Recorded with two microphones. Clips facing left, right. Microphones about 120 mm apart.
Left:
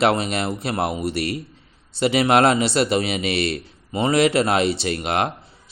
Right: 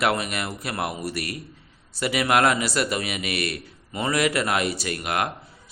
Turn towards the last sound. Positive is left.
turn(degrees=25)  # may be behind; listen again after turning